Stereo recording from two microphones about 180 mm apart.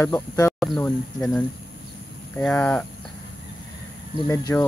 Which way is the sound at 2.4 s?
10° left (ahead or behind).